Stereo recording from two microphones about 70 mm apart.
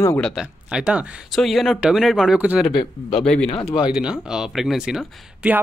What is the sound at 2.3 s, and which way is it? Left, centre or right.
Speech, centre.